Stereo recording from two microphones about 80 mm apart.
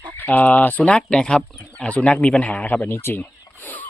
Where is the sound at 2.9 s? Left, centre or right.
Left.